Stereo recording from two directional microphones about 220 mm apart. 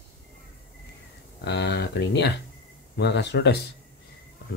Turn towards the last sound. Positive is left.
turn(degrees=50)  # may be behind; listen again after turning